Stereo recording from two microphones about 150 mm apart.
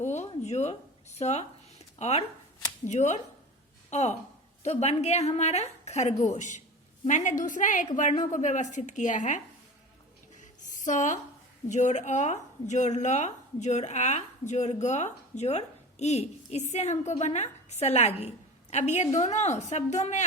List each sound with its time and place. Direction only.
0.0 s a woman's voice: 50° left (ahead or behind)
10.3 s a sound: 55° left (ahead or behind)
11.7 s a woman's voice: 50° left (ahead or behind)